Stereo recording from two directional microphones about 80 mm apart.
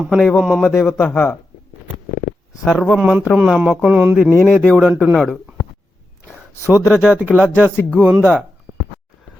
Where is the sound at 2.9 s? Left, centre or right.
Centre.